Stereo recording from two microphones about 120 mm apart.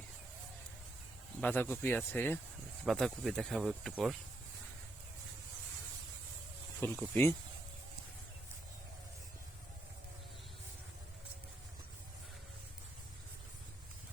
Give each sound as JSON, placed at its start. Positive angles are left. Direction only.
{"t": 1.4, "sound": "speech", "side_deg": 15}
{"t": 2.8, "sound": "speech", "side_deg": 0}
{"t": 6.7, "sound": "speech", "side_deg": 15}